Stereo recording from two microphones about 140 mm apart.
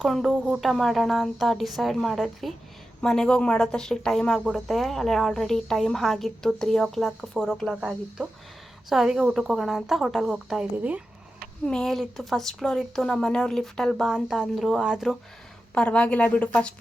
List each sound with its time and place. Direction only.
0.0 s speech: centre (ahead or behind)
11.6 s speech: 5° left (ahead or behind)
15.7 s a woman's voice: 10° left (ahead or behind)